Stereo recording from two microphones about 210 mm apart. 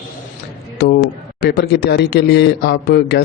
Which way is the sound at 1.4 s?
55° left (ahead or behind).